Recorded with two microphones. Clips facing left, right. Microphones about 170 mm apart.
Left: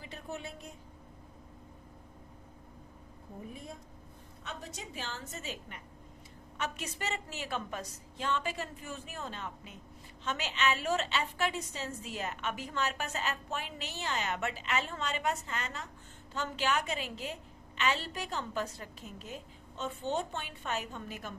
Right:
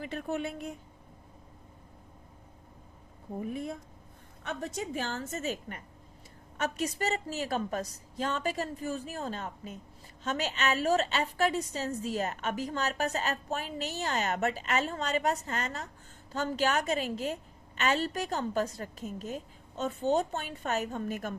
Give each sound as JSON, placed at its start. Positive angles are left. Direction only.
{"t": 0.0, "sound": "a woman's voice", "side_deg": -60}
{"t": 3.4, "sound": "speech", "side_deg": -70}
{"t": 4.4, "sound": "a woman's voice", "side_deg": -50}